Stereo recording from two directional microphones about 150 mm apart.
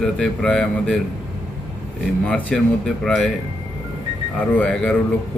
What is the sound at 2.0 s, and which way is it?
Speech, 5° left (ahead or behind).